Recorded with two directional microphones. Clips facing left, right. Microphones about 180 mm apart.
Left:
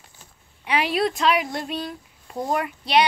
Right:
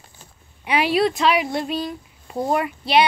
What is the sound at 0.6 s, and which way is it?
A woman's voice, 10° right (ahead or behind).